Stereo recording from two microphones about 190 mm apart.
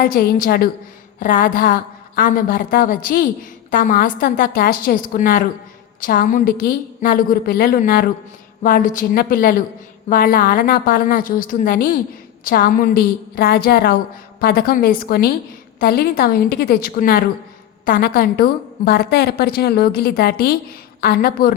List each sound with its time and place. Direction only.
0.0 s a woman's voice: 50° left (ahead or behind)